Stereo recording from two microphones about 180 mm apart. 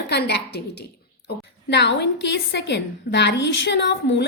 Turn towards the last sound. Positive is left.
turn(degrees=75)  # may be behind; listen again after turning